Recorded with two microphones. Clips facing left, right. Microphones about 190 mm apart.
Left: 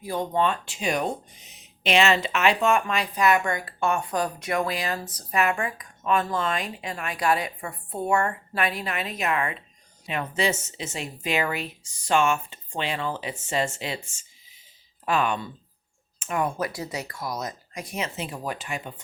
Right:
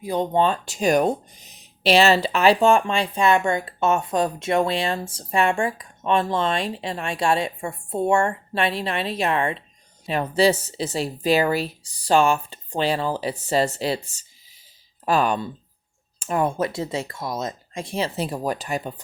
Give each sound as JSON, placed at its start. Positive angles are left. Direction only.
{"t": 0.0, "sound": "speech", "side_deg": -20}
{"t": 0.3, "sound": "speech", "side_deg": -35}